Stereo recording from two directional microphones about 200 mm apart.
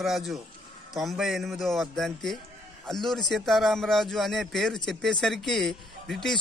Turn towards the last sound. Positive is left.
turn(degrees=0)  # may be behind; listen again after turning